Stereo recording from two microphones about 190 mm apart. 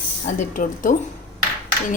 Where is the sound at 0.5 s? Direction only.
45° left (ahead or behind).